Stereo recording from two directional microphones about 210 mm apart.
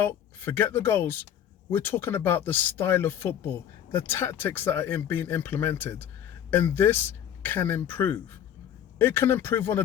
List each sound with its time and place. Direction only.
0.0 s speech: 10° left (ahead or behind)